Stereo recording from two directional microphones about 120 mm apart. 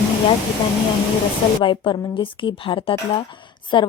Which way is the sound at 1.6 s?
45° left (ahead or behind).